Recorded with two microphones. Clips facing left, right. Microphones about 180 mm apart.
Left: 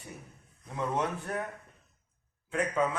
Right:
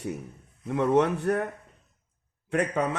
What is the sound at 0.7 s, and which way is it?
Speech, 70° right (ahead or behind).